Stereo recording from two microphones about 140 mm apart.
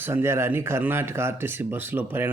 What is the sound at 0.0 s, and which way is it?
Speech, 15° right (ahead or behind).